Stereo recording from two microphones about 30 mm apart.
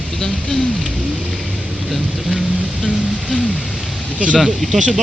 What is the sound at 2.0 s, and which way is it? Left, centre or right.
Speech, centre.